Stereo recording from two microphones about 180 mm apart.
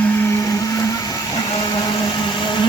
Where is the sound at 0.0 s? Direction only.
10° left (ahead or behind).